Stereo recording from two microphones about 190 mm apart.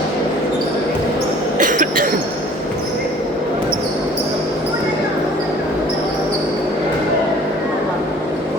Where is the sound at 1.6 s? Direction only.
45° right (ahead or behind).